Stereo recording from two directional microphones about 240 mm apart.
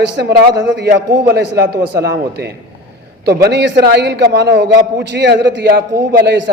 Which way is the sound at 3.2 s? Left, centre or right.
Right.